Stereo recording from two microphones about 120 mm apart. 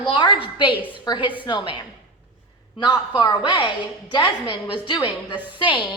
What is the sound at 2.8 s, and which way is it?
A woman's voice, 40° left (ahead or behind).